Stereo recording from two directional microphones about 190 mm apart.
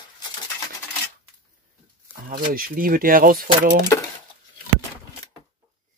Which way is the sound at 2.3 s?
50° right (ahead or behind).